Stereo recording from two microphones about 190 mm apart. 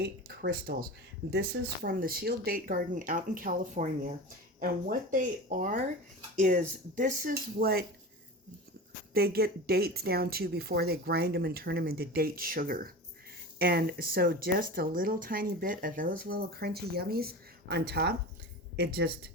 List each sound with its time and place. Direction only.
0.0 s speech: 55° right (ahead or behind)
9.1 s speech: 55° right (ahead or behind)